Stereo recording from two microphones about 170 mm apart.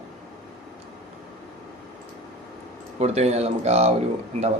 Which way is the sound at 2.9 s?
40° right (ahead or behind).